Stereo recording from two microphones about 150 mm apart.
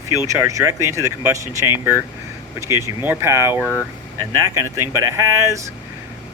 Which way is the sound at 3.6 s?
15° left (ahead or behind).